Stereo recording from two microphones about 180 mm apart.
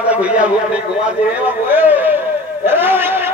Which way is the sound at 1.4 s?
10° right (ahead or behind).